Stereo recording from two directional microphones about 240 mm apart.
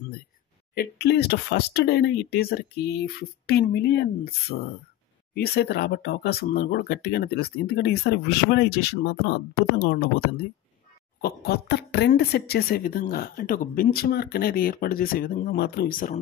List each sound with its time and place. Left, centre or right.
0.7 s speech: left